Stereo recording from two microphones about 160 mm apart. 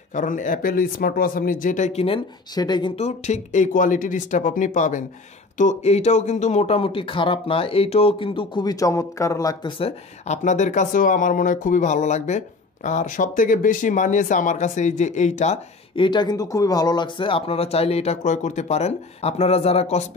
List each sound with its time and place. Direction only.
0.1 s speech: 55° left (ahead or behind); by 2.9 s 25° left (ahead or behind)
3.0 s speech: 45° left (ahead or behind)
16.0 s speech: 25° left (ahead or behind)